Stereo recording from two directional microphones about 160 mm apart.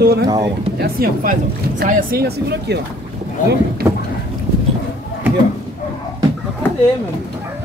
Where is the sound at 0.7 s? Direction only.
75° right (ahead or behind).